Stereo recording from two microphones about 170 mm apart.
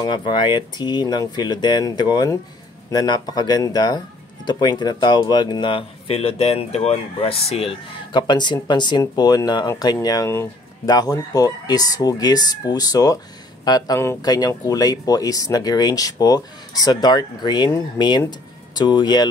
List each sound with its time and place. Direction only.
0.0 s speech: 25° left (ahead or behind)